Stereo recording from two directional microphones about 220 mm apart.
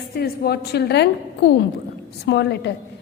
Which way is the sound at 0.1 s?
45° left (ahead or behind).